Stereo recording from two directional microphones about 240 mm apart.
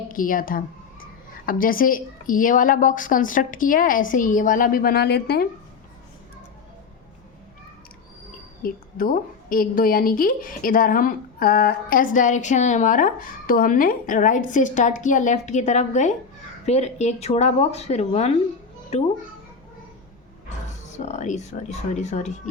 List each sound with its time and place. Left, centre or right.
0.1 s a woman's voice: left
8.6 s a woman's voice: left
20.9 s speech: left